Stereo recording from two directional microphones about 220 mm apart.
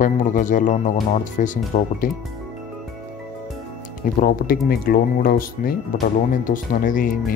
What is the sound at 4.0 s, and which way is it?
Speech, 40° left (ahead or behind).